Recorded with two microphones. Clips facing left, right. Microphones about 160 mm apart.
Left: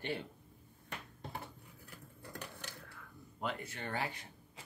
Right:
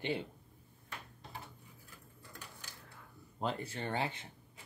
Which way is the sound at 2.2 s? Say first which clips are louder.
Left 6 dB; 65° left (ahead or behind).